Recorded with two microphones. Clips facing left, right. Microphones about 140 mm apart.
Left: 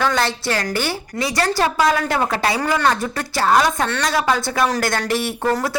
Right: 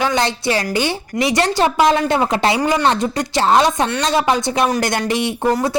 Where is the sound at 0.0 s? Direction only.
15° right (ahead or behind).